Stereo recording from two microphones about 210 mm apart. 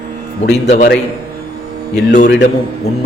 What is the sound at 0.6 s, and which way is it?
Speech, 35° left (ahead or behind).